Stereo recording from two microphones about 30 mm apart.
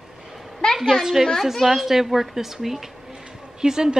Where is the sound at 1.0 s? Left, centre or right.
Centre.